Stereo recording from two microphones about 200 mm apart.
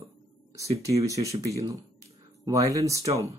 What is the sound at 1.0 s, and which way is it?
Speech, 15° right (ahead or behind).